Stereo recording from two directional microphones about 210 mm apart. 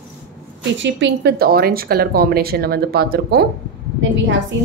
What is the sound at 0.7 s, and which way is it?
Speech, 60° right (ahead or behind).